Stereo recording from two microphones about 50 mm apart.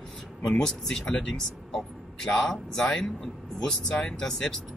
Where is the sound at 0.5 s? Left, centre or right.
Centre.